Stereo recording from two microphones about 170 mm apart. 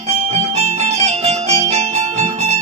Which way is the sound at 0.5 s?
40° right (ahead or behind).